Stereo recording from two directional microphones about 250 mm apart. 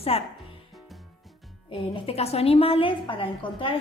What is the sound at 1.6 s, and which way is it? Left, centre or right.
A woman's voice, left.